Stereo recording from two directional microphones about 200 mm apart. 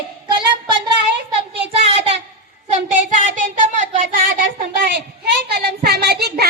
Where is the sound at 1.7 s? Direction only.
30° right (ahead or behind); by 6.5 s 55° right (ahead or behind).